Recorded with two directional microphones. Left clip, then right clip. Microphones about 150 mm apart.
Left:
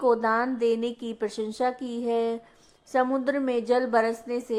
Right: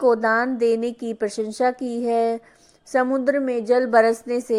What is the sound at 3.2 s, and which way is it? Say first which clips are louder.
A woman's voice: right 5 dB; 15° right (ahead or behind).